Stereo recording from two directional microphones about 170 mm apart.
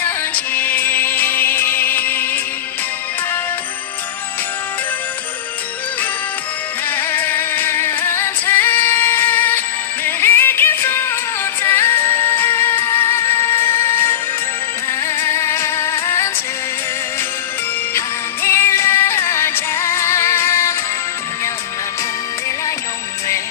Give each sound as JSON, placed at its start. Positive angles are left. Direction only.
{"t": 0.0, "sound": "music", "side_deg": 10}
{"t": 6.8, "sound": "music", "side_deg": 10}
{"t": 18.4, "sound": "music", "side_deg": 15}